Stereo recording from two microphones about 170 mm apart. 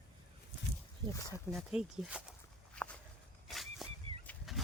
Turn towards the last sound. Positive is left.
turn(degrees=0)  # may be behind; listen again after turning